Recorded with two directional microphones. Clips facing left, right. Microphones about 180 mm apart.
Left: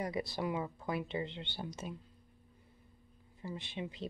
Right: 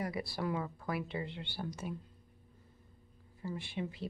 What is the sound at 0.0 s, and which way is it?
Speech, 20° left (ahead or behind).